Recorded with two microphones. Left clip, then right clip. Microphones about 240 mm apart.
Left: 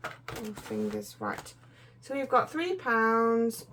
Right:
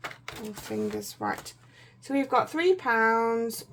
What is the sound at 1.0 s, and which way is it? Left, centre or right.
Speech, right.